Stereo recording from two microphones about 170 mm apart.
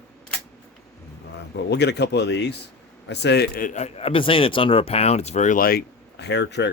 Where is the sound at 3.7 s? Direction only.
40° left (ahead or behind); by 6.7 s 90° left.